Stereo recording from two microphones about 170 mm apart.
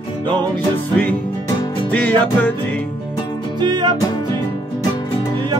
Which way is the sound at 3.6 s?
25° right (ahead or behind).